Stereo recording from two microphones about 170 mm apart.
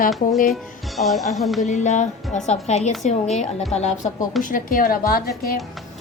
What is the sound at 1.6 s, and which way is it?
A woman's voice, 45° left (ahead or behind).